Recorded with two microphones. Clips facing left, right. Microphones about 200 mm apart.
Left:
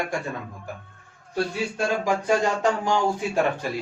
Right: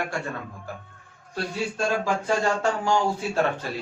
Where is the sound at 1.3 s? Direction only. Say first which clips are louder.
Left 3 dB; 15° left (ahead or behind).